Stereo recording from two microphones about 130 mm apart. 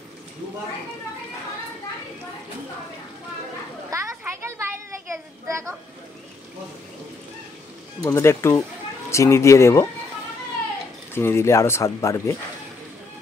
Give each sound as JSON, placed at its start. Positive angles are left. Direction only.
{"t": 3.9, "sound": "children playing", "side_deg": -25}
{"t": 4.2, "sound": "a sound", "side_deg": -20}
{"t": 5.5, "sound": "speech", "side_deg": -20}
{"t": 8.0, "sound": "speech", "side_deg": 20}
{"t": 11.1, "sound": "speech", "side_deg": 20}